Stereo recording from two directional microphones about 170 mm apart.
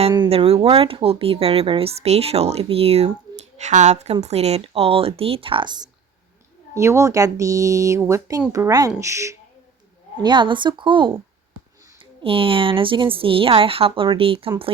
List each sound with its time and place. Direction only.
0.1 s speech: 30° right (ahead or behind)
10.2 s speech: 30° right (ahead or behind)
12.2 s speech: 30° right (ahead or behind)